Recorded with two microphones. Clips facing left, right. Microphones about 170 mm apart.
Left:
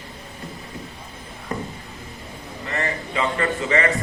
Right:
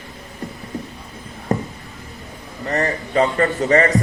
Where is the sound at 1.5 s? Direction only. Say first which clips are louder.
Right 7 dB; 40° right (ahead or behind).